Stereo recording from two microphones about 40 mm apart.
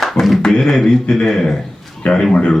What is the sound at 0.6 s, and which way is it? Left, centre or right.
Speech, centre.